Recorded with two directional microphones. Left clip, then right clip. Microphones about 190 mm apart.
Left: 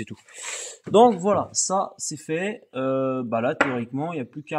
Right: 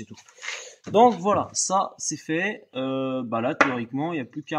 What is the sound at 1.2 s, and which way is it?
Speech, 30° left (ahead or behind).